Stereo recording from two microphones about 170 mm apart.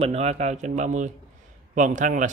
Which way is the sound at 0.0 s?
40° right (ahead or behind).